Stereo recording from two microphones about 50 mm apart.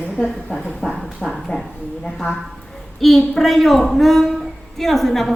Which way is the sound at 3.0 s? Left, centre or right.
Centre.